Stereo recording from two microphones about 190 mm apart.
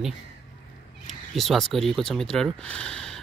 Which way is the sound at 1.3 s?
Centre (ahead or behind).